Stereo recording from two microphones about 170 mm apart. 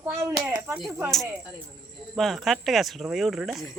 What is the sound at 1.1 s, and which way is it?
Speech, centre (ahead or behind).